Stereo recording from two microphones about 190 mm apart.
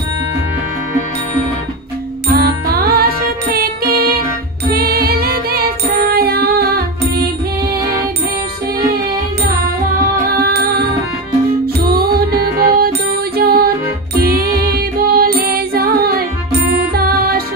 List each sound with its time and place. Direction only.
2.2 s music: 55° right (ahead or behind)
10.4 s music: 55° right (ahead or behind)
12.0 s music: 55° right (ahead or behind)